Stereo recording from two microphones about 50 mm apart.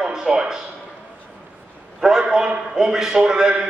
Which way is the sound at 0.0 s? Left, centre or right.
Centre.